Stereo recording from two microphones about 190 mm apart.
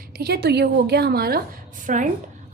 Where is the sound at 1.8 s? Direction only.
40° right (ahead or behind).